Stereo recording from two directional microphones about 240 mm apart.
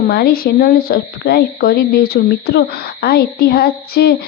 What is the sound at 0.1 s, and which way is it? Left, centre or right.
Speech, left.